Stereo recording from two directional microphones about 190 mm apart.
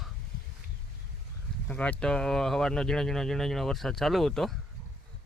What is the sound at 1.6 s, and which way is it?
Speech, 5° left (ahead or behind).